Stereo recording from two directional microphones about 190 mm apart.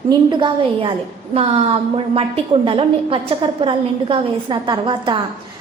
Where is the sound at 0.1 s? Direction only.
25° right (ahead or behind).